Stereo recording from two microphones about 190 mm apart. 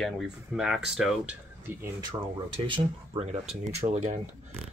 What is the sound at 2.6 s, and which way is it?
Speech, 30° right (ahead or behind).